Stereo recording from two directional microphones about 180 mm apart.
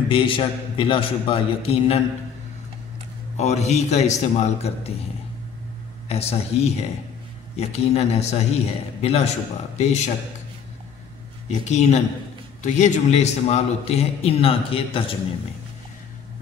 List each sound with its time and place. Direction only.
0.1 s a man's voice: 30° left (ahead or behind)
3.3 s a man's voice: 40° left (ahead or behind)
6.0 s a man's voice: 35° left (ahead or behind)
11.6 s a man's voice: 40° left (ahead or behind)